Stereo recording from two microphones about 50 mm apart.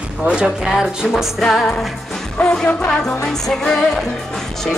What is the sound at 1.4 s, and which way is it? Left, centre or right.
Music, centre.